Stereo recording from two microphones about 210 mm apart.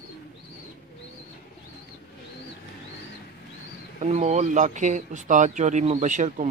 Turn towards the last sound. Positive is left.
turn(degrees=-35)  # may be behind; listen again after turning